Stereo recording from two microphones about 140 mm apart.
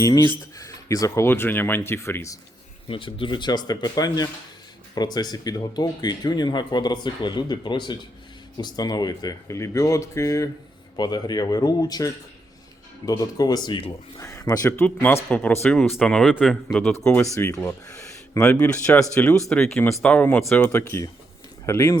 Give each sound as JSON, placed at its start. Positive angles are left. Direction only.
{"t": 0.0, "sound": "speech", "side_deg": 30}
{"t": 2.8, "sound": "speech", "side_deg": 40}
{"t": 14.2, "sound": "speech", "side_deg": 25}
{"t": 17.0, "sound": "speech", "side_deg": 15}
{"t": 18.6, "sound": "speech", "side_deg": 10}